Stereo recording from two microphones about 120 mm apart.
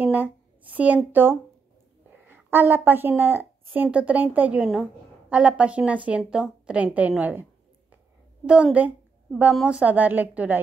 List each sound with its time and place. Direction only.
0.0 s a sound: 15° right (ahead or behind)
1.1 s a woman's voice: 20° right (ahead or behind)
9.4 s a woman's voice: 10° right (ahead or behind)